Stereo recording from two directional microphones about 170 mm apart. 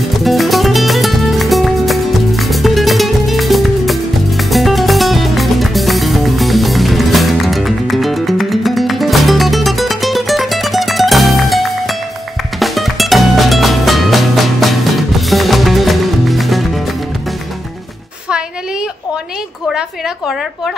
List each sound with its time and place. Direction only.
0.2 s music: centre (ahead or behind)